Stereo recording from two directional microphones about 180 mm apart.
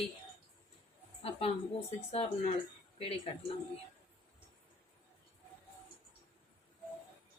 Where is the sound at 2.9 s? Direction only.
35° left (ahead or behind).